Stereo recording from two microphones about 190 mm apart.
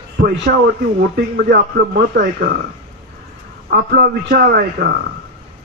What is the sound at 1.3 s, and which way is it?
A man's voice, 55° right (ahead or behind).